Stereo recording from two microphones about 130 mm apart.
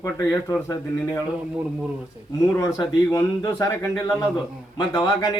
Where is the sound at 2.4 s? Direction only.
25° left (ahead or behind).